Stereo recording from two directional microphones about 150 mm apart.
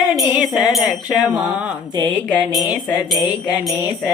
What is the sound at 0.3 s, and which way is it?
Music, centre (ahead or behind).